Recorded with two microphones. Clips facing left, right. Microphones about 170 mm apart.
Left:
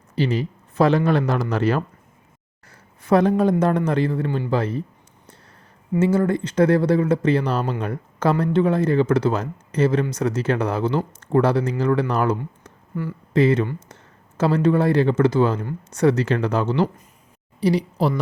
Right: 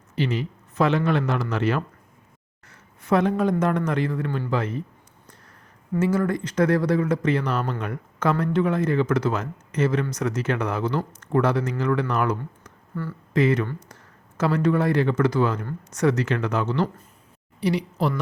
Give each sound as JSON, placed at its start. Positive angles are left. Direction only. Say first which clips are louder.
{"t": 0.2, "sound": "speech", "louder": "left 3 dB", "side_deg": 35}
{"t": 6.0, "sound": "speech", "louder": "left 3 dB", "side_deg": 30}
{"t": 12.9, "sound": "speech", "louder": "left 3 dB", "side_deg": 15}
{"t": 13.3, "sound": "speech", "louder": "left 3 dB", "side_deg": 30}